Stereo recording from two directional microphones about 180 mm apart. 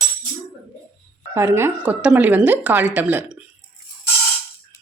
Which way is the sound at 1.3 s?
15° right (ahead or behind).